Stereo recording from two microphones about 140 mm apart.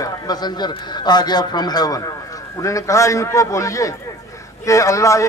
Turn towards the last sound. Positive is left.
turn(degrees=20)  # may be behind; listen again after turning